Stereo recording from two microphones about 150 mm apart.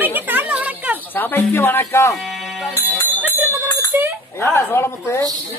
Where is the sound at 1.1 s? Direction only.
10° left (ahead or behind).